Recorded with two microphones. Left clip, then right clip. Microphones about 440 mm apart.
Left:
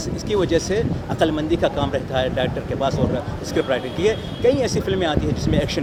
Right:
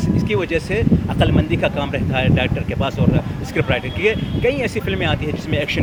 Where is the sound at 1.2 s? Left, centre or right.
Right.